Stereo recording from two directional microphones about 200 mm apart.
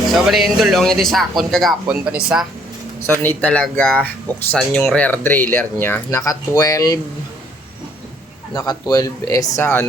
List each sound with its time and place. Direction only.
0.1 s speech: centre (ahead or behind)
3.2 s speech: 10° left (ahead or behind)
8.5 s speech: 20° left (ahead or behind)